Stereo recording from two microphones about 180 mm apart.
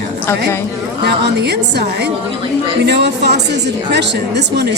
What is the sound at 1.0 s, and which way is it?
A woman's voice, 65° right (ahead or behind).